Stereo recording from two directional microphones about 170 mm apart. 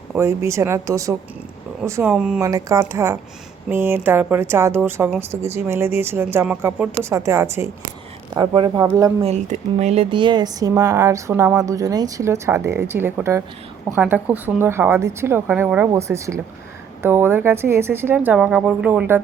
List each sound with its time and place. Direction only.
0.2 s speech: 15° right (ahead or behind)
2.4 s a woman's voice: 20° right (ahead or behind)
9.2 s a woman's voice: 40° right (ahead or behind); by 19.2 s 10° right (ahead or behind)